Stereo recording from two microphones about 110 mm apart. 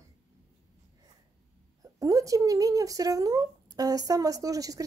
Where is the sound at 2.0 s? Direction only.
30° right (ahead or behind).